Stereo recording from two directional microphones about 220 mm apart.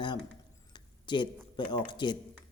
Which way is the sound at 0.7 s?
20° left (ahead or behind).